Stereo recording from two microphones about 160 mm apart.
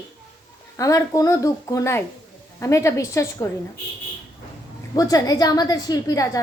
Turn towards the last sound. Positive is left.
turn(degrees=20)  # may be behind; listen again after turning